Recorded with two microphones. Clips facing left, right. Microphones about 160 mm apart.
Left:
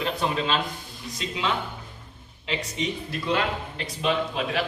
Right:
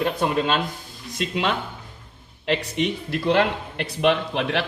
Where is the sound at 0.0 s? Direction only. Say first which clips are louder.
Right 4 dB; 55° right (ahead or behind).